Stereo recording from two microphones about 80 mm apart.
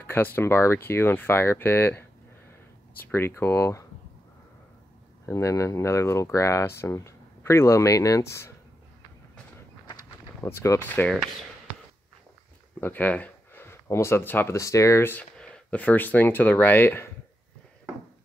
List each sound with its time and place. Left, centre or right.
0.0 s speech: left
3.1 s speech: left
5.2 s speech: left
10.4 s speech: left
12.8 s speech: left
14.5 s speech: left
15.3 s speech: centre; by 17.1 s left